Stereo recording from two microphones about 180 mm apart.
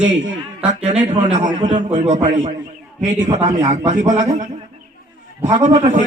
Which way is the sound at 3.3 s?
40° right (ahead or behind).